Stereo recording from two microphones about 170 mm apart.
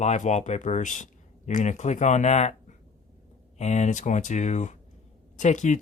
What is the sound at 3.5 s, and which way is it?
Speech, 40° left (ahead or behind).